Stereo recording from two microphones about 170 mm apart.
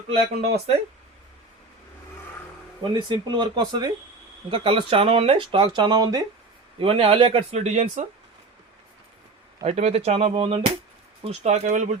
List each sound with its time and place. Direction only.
0.1 s speech: 35° right (ahead or behind)
2.9 s speech: 25° right (ahead or behind)
6.7 s speech: 35° right (ahead or behind)
9.6 s speech: 40° right (ahead or behind)